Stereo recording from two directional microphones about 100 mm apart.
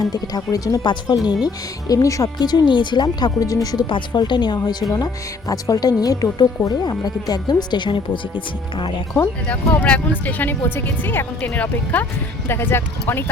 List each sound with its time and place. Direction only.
0.0 s speech: 40° left (ahead or behind)
3.8 s speech: 50° left (ahead or behind)
9.5 s speech: 15° left (ahead or behind)